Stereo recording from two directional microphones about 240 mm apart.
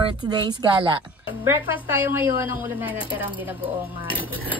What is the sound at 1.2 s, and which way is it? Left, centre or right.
A woman's voice, centre.